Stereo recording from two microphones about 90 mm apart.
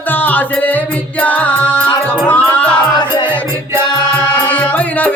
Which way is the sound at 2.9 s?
60° left (ahead or behind).